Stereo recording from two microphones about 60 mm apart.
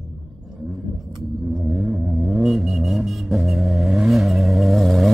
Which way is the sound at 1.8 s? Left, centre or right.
Centre.